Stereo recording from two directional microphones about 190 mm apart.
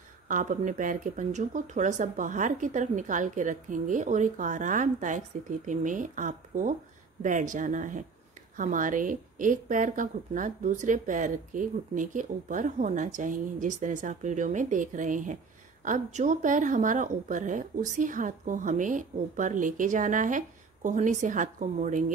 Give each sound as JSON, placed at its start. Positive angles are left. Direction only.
{"t": 0.3, "sound": "a woman's voice", "side_deg": -40}